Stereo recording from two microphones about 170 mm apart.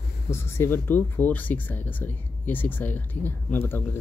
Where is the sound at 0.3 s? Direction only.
15° left (ahead or behind).